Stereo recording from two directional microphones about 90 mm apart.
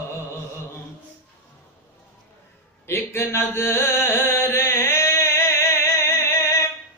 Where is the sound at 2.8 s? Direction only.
25° left (ahead or behind).